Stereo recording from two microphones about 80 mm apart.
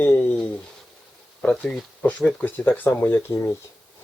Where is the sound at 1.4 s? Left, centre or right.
Centre.